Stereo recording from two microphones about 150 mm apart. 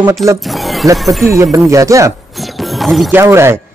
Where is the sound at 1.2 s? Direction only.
20° right (ahead or behind).